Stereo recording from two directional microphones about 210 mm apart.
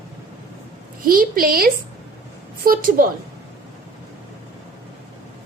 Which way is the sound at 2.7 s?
40° right (ahead or behind).